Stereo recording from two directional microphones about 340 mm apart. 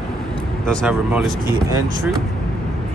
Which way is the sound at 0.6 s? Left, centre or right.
Centre.